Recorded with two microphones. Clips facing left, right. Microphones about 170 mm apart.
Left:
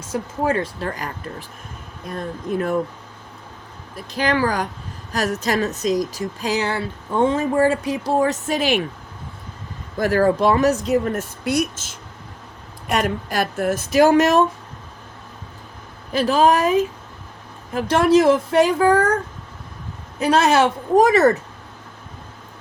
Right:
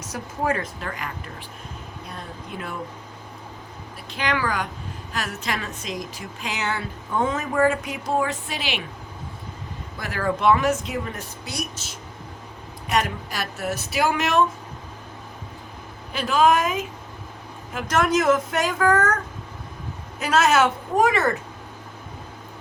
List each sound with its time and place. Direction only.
0.0 s a woman's voice: 30° left (ahead or behind); by 2.7 s 45° left (ahead or behind)
3.9 s a woman's voice: 40° left (ahead or behind)
10.0 s a woman's voice: 40° left (ahead or behind)
12.9 s speech: 50° left (ahead or behind)
16.1 s a woman's voice: 35° left (ahead or behind)